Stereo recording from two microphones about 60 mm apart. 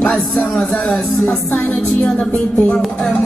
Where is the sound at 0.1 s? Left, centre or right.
Centre.